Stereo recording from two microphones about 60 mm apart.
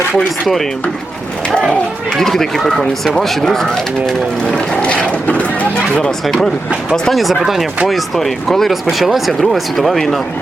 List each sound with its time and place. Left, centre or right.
0.4 s speech: centre
2.0 s speech: centre; by 6.0 s left
6.2 s speech: centre
7.2 s speech: centre